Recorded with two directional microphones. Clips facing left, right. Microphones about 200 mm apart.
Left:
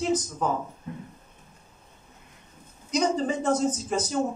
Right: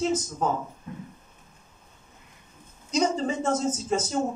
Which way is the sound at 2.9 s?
25° right (ahead or behind).